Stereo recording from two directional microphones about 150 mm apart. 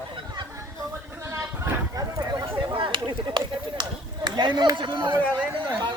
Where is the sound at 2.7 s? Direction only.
30° right (ahead or behind).